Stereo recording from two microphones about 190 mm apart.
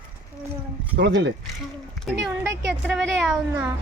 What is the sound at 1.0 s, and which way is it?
Speech, 70° right (ahead or behind).